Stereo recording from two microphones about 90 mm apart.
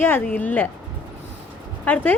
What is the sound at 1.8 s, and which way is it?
Speech, 15° left (ahead or behind).